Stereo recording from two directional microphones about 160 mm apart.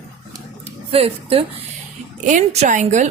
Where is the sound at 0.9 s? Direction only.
40° right (ahead or behind).